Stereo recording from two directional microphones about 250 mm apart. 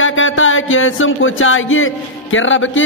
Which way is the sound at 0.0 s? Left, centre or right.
Left.